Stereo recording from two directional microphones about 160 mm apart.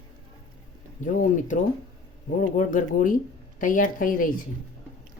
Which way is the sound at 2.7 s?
55° left (ahead or behind).